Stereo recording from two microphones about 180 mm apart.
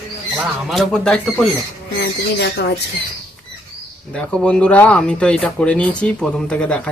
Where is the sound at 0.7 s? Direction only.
5° left (ahead or behind).